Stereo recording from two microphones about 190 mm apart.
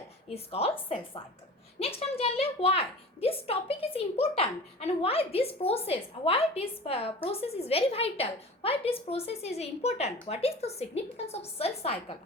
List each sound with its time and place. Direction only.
0.3 s a woman's voice: 30° left (ahead or behind)